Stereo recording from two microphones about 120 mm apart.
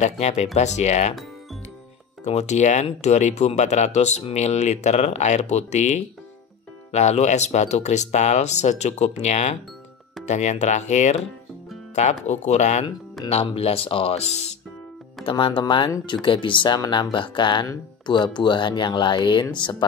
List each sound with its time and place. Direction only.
0.0 s speech: 65° left (ahead or behind)
2.2 s speech: 75° left (ahead or behind)
13.3 s speech: 55° left (ahead or behind)
15.2 s speech: 45° left (ahead or behind)